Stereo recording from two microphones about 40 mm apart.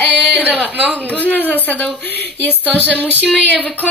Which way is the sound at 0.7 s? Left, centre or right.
Right.